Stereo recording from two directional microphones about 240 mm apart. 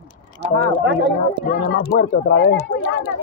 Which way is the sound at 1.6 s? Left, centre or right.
Left.